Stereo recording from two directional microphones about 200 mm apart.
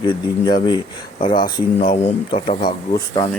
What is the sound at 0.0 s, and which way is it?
Speech, 25° left (ahead or behind).